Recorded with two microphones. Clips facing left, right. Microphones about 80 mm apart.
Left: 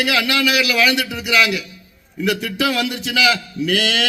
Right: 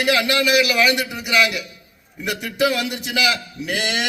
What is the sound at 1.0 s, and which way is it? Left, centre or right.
Speech, centre.